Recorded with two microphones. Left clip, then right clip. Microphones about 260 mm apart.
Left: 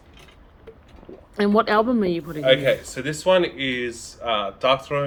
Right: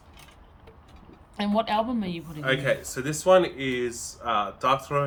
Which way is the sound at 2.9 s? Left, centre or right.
Right.